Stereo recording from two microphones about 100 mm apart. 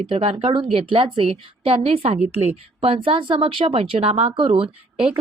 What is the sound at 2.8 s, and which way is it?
Speech, 70° right (ahead or behind).